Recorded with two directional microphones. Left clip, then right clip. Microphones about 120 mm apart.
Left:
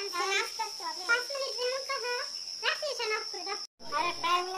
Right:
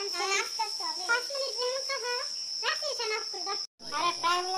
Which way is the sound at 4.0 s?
45° right (ahead or behind).